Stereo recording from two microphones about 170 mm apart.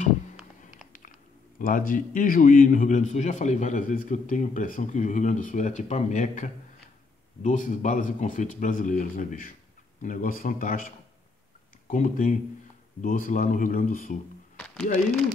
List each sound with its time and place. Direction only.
1.6 s a man's voice: 55° left (ahead or behind)
11.9 s a man's voice: 50° left (ahead or behind)
14.6 s a sound: 5° left (ahead or behind)